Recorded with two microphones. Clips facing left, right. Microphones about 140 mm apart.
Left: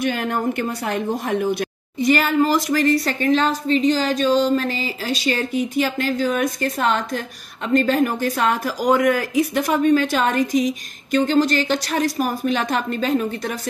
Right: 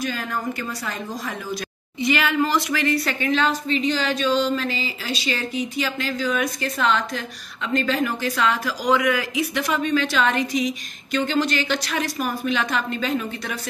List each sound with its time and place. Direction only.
0.0 s speech: 60° left (ahead or behind); by 13.6 s 40° left (ahead or behind)